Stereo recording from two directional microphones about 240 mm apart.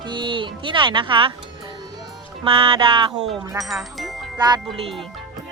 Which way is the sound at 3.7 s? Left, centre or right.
Centre.